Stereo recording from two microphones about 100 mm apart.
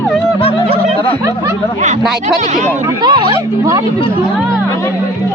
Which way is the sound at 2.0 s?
5° right (ahead or behind).